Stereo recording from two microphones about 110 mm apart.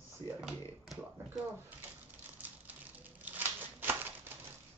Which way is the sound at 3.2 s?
15° right (ahead or behind).